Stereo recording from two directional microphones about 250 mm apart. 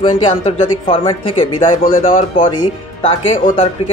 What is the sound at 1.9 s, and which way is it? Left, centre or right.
A man's voice, left.